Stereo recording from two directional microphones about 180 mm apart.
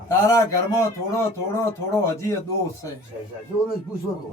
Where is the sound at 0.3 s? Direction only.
15° left (ahead or behind).